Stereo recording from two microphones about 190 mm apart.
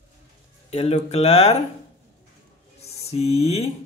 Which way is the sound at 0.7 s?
35° left (ahead or behind).